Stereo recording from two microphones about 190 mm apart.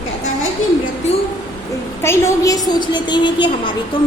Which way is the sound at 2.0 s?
15° left (ahead or behind).